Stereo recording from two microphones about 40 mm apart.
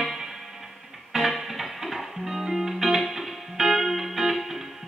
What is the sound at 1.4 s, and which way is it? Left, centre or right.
Music, centre.